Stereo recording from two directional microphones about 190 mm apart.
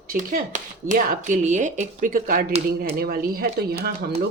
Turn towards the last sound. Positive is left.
turn(degrees=-55)  # may be behind; listen again after turning